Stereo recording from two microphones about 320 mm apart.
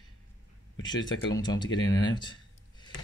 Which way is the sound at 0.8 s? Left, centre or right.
Centre.